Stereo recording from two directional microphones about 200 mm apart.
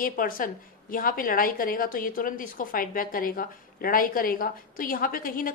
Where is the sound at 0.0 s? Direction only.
45° left (ahead or behind).